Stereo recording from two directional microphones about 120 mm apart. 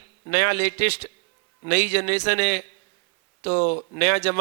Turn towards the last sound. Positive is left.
turn(degrees=25)  # may be behind; listen again after turning